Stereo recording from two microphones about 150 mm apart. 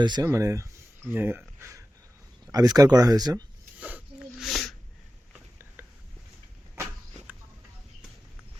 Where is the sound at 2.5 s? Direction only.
25° right (ahead or behind).